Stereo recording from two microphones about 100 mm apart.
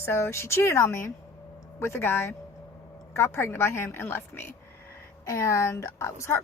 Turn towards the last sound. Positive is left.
turn(degrees=25)  # may be behind; listen again after turning